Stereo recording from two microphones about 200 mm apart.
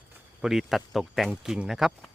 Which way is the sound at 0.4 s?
Centre (ahead or behind).